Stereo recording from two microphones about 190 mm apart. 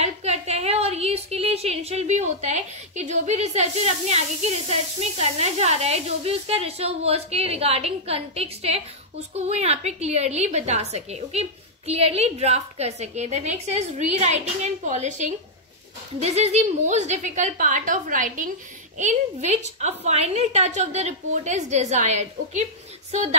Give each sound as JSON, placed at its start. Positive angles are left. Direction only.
{"t": 0.0, "sound": "a woman's voice", "side_deg": -35}